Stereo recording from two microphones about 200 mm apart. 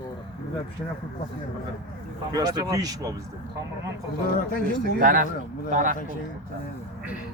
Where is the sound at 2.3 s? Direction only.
20° right (ahead or behind).